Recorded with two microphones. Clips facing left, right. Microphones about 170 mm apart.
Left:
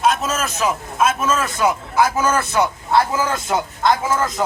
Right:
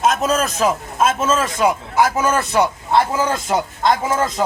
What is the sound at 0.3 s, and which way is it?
A man's voice, 35° right (ahead or behind).